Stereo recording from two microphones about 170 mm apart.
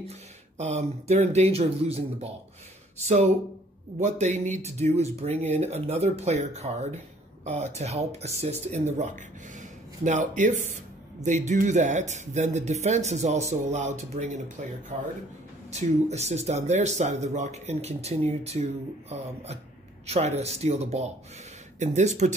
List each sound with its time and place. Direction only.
0.6 s speech: 40° right (ahead or behind)
4.0 s speech: 45° right (ahead or behind)
15.7 s speech: 40° right (ahead or behind)